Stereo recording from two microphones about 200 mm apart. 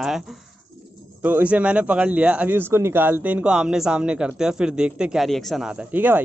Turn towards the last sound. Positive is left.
turn(degrees=-10)  # may be behind; listen again after turning